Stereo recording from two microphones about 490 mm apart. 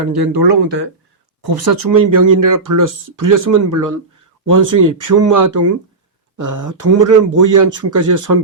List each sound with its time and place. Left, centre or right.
0.1 s speech: right